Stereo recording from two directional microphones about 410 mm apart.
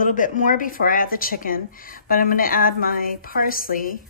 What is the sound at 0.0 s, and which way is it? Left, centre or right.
A woman's voice, centre.